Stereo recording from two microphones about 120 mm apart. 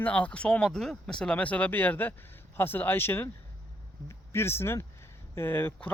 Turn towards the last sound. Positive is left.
turn(degrees=15)  # may be behind; listen again after turning